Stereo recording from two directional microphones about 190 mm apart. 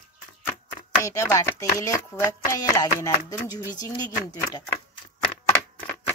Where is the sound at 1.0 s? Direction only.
15° left (ahead or behind).